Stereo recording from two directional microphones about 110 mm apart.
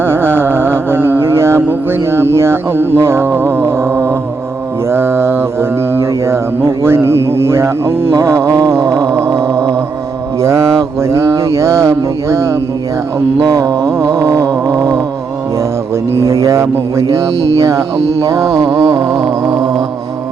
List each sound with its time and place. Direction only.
0.0 s carnatic music: 20° right (ahead or behind)
1.2 s mantra: 25° right (ahead or behind)
9.3 s music: 30° right (ahead or behind)
11.0 s mantra: 25° right (ahead or behind)
13.4 s a sound: 30° right (ahead or behind)
16.1 s mantra: 30° right (ahead or behind)